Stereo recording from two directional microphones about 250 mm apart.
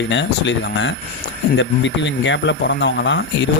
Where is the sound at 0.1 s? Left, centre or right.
Left.